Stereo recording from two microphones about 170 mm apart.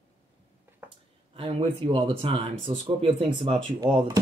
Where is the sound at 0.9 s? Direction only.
30° right (ahead or behind).